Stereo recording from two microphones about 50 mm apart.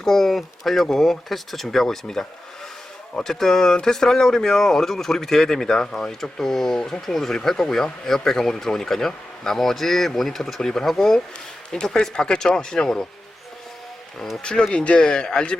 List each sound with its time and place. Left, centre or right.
0.0 s speech: centre
14.4 s speech: centre